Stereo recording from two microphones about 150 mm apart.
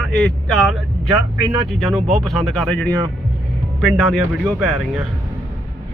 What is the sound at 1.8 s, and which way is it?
Speech, centre (ahead or behind).